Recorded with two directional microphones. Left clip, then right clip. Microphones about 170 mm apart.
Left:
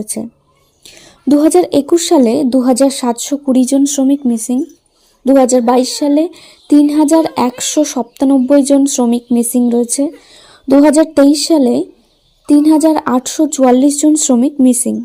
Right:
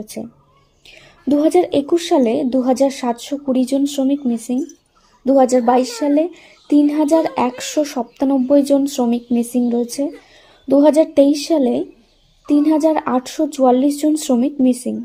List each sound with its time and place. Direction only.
0.0 s a woman's voice: 40° left (ahead or behind)